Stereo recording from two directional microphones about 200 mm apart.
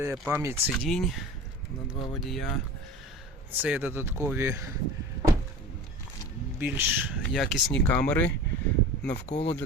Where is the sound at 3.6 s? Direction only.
10° right (ahead or behind).